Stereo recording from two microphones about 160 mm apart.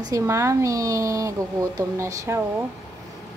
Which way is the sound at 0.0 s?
20° right (ahead or behind).